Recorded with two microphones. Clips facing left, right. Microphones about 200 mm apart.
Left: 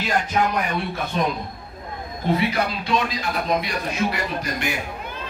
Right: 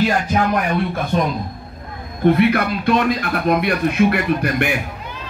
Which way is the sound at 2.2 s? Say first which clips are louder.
Right 7 dB; 60° right (ahead or behind).